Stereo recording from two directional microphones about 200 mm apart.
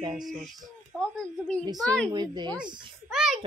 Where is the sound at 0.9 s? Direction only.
Centre (ahead or behind).